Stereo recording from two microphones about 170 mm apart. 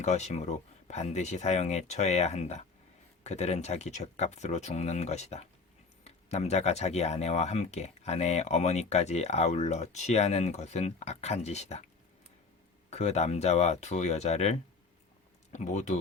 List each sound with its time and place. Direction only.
0.0 s speech: 40° left (ahead or behind)
12.9 s speech: 40° left (ahead or behind)